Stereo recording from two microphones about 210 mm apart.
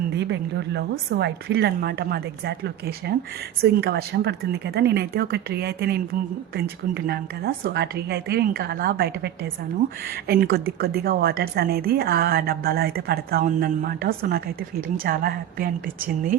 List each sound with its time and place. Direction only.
0.1 s a woman's voice: 55° right (ahead or behind)